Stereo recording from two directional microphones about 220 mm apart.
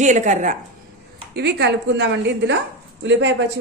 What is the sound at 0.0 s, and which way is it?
Speech, 35° right (ahead or behind).